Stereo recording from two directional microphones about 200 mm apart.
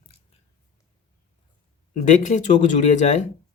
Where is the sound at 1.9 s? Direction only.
40° left (ahead or behind).